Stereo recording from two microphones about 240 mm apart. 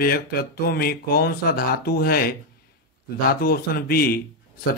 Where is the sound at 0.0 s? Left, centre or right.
Left.